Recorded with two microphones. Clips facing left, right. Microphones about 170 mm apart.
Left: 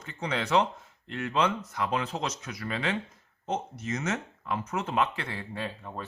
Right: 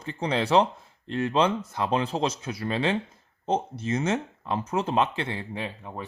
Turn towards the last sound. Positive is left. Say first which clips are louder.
# right 2 dB
turn(degrees=-15)  # may be behind; listen again after turning